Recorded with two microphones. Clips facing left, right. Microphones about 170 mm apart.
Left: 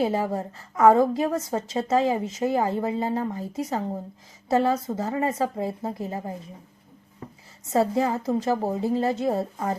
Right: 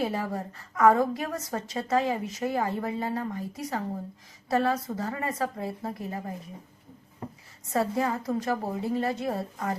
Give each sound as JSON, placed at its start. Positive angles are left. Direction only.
{"t": 0.0, "sound": "a woman's voice", "side_deg": 30}
{"t": 7.7, "sound": "a woman's voice", "side_deg": 25}